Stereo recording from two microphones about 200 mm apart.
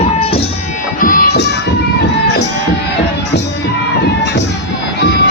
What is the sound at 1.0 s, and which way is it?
Music, 45° left (ahead or behind).